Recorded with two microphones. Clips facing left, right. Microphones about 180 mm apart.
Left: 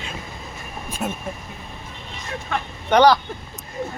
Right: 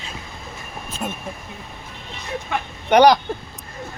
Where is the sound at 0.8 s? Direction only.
10° left (ahead or behind).